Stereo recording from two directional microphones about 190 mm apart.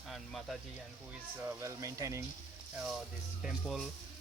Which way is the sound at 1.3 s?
10° right (ahead or behind).